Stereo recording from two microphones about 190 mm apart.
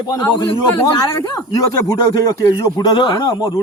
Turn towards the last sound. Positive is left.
turn(degrees=20)  # may be behind; listen again after turning